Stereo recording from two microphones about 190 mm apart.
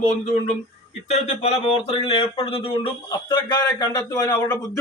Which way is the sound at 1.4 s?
35° left (ahead or behind).